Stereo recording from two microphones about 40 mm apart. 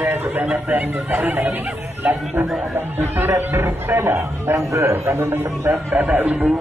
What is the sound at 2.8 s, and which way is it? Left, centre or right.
Speech, right.